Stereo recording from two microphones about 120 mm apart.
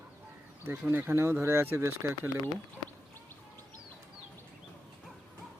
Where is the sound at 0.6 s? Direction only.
20° right (ahead or behind).